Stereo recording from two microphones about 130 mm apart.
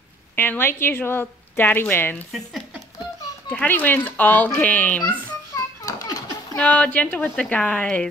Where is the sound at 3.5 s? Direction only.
15° left (ahead or behind).